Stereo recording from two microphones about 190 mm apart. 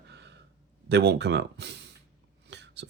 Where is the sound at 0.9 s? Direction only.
60° right (ahead or behind).